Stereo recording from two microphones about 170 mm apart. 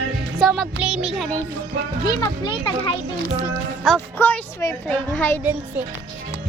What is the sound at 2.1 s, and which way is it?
Speech, 25° left (ahead or behind).